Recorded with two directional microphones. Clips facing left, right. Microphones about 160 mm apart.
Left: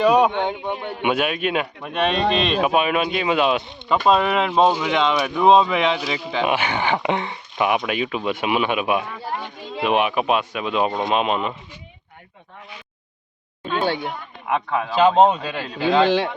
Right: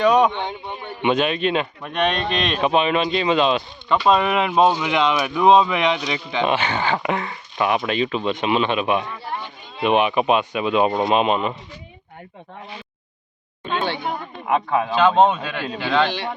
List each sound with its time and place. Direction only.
0.0 s speech: 5° left (ahead or behind)
0.3 s speech: 60° left (ahead or behind)
1.0 s speech: 10° left (ahead or behind)
13.7 s speech: 40° left (ahead or behind)
14.4 s speech: 5° right (ahead or behind)
15.2 s speech: 35° left (ahead or behind)